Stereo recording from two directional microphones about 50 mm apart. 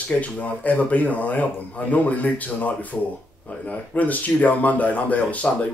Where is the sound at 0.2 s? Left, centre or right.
Left.